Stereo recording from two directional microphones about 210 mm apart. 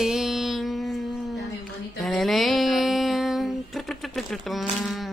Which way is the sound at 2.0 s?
Centre (ahead or behind).